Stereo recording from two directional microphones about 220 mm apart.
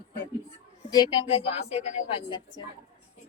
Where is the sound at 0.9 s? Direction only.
20° left (ahead or behind).